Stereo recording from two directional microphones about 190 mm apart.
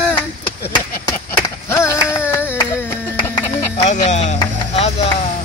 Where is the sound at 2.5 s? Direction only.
20° left (ahead or behind).